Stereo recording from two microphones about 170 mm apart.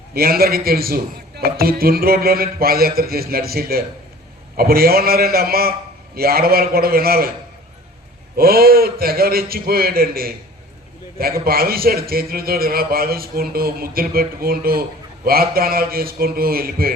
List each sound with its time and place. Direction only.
0.1 s a man's voice: 65° right (ahead or behind)
8.4 s a man's voice: 60° right (ahead or behind)